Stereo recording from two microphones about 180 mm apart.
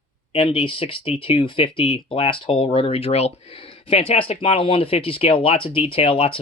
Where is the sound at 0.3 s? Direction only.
30° left (ahead or behind).